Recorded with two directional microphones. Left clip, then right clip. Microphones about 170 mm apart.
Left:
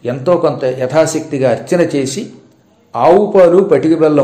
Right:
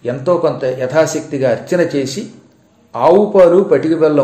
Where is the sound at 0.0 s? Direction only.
15° left (ahead or behind).